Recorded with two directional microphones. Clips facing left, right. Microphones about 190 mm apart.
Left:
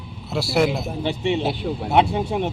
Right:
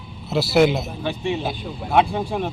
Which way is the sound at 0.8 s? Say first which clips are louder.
Left 2 dB; 25° left (ahead or behind).